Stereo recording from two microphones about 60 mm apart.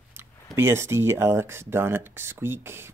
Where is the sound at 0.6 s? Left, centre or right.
Right.